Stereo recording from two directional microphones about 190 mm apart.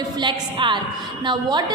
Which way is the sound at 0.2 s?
25° right (ahead or behind).